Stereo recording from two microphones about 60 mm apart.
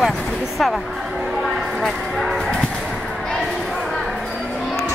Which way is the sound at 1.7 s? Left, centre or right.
Centre.